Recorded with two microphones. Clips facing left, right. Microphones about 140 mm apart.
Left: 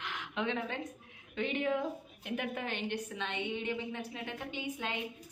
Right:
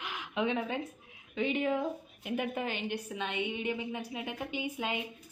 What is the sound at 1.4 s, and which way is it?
A woman's voice, 5° right (ahead or behind).